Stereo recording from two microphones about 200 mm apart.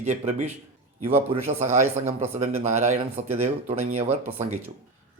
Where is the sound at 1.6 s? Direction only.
35° right (ahead or behind).